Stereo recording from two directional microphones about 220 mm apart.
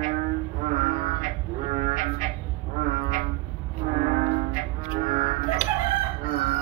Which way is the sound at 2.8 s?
35° right (ahead or behind).